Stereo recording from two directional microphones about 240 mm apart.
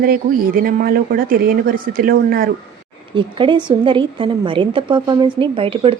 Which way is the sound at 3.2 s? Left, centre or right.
Right.